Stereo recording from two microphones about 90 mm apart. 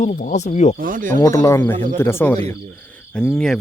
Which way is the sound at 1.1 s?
35° left (ahead or behind).